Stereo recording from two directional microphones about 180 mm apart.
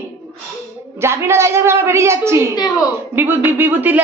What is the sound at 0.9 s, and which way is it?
A man's voice, 15° right (ahead or behind).